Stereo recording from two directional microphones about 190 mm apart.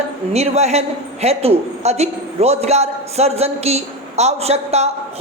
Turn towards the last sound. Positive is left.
turn(degrees=-35)  # may be behind; listen again after turning